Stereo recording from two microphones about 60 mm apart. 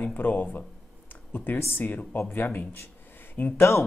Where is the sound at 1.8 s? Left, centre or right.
Left.